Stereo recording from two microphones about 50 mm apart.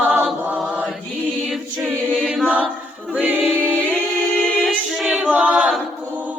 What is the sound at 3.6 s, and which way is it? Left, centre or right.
A capella, left.